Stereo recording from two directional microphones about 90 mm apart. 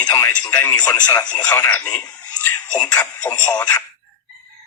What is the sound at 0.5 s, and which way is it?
A man's voice, 15° left (ahead or behind).